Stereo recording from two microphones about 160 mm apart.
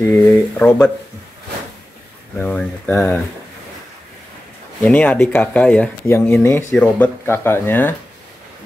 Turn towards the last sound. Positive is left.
turn(degrees=15)  # may be behind; listen again after turning